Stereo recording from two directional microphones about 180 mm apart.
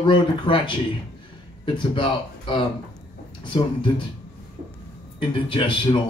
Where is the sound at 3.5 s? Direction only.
30° left (ahead or behind).